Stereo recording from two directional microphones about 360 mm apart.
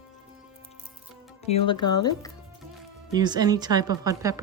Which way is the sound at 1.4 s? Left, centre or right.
Centre.